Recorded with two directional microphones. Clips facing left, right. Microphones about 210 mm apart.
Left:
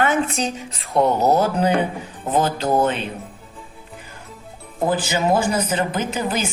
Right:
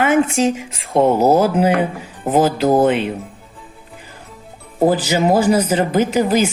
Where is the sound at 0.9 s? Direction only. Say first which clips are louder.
Right 4 dB; 30° right (ahead or behind).